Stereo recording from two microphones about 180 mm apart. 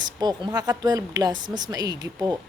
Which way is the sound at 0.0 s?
25° right (ahead or behind).